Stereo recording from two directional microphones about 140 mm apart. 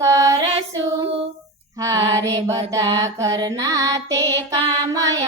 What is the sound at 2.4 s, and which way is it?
Music, 25° right (ahead or behind).